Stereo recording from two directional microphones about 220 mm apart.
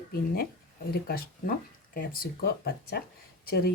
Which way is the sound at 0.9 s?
45° left (ahead or behind).